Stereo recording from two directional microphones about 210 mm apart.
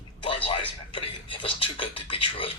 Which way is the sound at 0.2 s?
25° left (ahead or behind).